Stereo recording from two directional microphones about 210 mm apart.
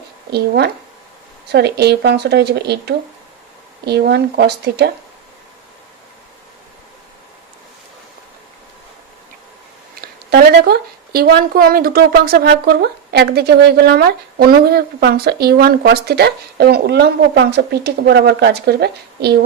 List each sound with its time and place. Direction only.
0.3 s a woman's voice: 50° right (ahead or behind)
9.9 s a woman's voice: 45° right (ahead or behind)